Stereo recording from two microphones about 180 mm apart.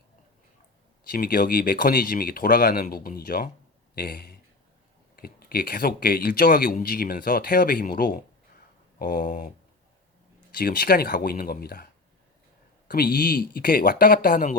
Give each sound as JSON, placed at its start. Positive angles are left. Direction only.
{"t": 1.0, "sound": "a man's voice", "side_deg": 55}
{"t": 10.6, "sound": "speech", "side_deg": 55}
{"t": 12.9, "sound": "speech", "side_deg": 55}